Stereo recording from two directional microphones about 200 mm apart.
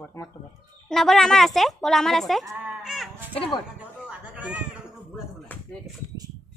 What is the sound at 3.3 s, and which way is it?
Speech, 30° left (ahead or behind).